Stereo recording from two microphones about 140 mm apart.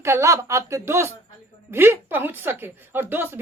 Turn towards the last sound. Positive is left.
turn(degrees=-15)  # may be behind; listen again after turning